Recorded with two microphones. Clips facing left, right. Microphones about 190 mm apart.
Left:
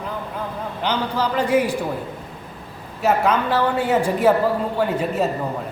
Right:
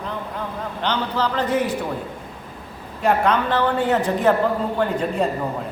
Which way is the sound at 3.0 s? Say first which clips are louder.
Even; 5° left (ahead or behind).